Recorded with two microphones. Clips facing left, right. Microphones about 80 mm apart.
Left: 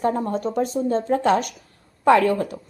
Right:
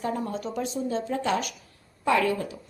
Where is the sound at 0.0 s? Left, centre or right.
Left.